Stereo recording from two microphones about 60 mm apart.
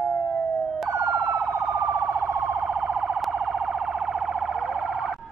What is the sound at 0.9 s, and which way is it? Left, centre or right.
Emergency vehicle, right.